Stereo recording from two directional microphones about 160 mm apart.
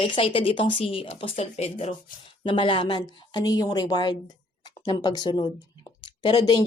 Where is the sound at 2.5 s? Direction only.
30° left (ahead or behind).